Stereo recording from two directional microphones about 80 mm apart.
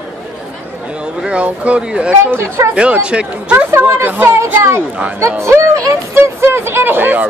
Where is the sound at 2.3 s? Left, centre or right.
Right.